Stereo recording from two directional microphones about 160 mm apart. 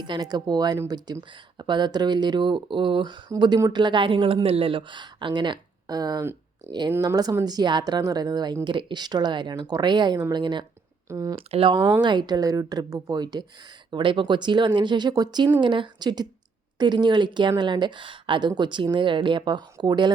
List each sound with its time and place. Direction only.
0.0 s speech: 25° right (ahead or behind)
11.3 s speech: 35° right (ahead or behind)